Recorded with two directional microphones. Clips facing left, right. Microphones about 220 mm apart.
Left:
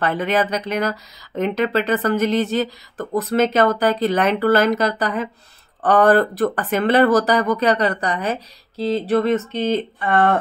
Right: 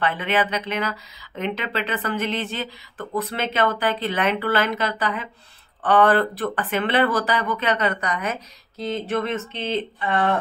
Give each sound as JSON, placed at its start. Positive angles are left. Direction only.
{"t": 0.0, "sound": "speech", "side_deg": 40}